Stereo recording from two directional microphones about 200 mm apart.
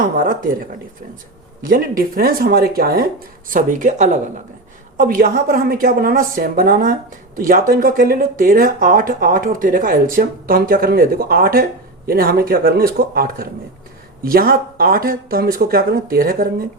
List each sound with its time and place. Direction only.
0.0 s speech: 45° right (ahead or behind)